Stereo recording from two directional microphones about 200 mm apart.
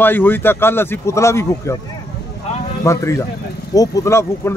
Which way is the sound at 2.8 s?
15° left (ahead or behind).